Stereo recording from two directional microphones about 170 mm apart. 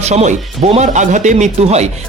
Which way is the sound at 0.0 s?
40° right (ahead or behind).